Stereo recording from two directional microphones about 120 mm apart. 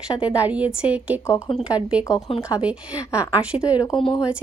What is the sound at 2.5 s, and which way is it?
A woman's voice, 10° right (ahead or behind).